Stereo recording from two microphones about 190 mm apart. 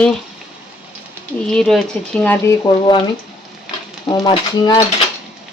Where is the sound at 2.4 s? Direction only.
25° left (ahead or behind).